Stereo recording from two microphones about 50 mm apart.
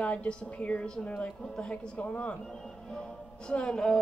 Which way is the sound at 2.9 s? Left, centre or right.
Centre.